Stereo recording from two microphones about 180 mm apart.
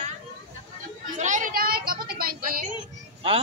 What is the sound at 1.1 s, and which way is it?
A woman's voice, 45° right (ahead or behind).